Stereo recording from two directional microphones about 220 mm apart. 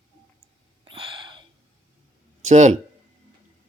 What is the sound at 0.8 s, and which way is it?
Sneeze, 25° right (ahead or behind).